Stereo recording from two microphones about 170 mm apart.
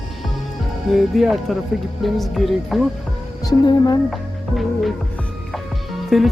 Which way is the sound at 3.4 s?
25° left (ahead or behind).